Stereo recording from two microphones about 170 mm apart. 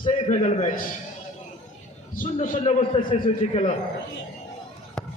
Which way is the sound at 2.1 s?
50° left (ahead or behind).